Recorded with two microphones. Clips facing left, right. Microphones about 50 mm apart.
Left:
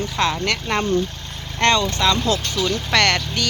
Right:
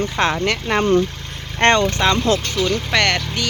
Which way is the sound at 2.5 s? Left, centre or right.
Right.